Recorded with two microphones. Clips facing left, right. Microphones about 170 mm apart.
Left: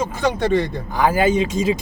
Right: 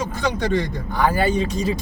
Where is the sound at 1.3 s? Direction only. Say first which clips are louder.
Left 3 dB; 90° left.